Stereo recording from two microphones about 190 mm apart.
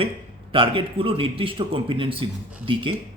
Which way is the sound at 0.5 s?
25° right (ahead or behind).